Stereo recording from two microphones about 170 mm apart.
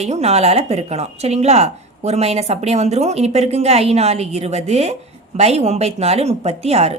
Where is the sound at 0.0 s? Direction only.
40° right (ahead or behind).